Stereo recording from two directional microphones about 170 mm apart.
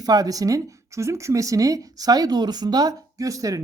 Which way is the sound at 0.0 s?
20° right (ahead or behind).